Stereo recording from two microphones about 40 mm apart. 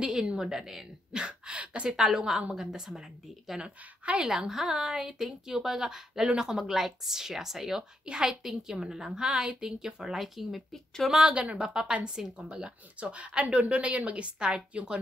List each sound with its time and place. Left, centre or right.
0.4 s speech: centre
1.1 s a sound: right
2.0 s speech: centre
3.5 s a woman's voice: right
4.3 s speech: centre
10.2 s speech: centre
11.5 s a woman's voice: right